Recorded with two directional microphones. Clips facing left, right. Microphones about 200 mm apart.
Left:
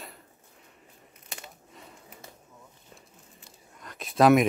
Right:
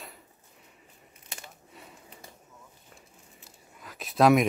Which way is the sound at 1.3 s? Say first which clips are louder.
Left 1 dB; centre (ahead or behind).